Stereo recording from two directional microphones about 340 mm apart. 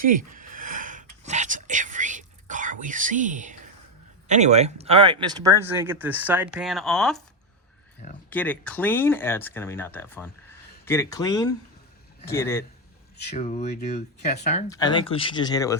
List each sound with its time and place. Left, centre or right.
0.0 s a sound: right
4.3 s speech: centre
8.3 s speech: centre
13.1 s speech: centre